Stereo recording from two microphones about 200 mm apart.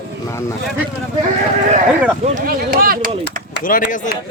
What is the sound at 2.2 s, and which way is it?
Speech, 45° right (ahead or behind).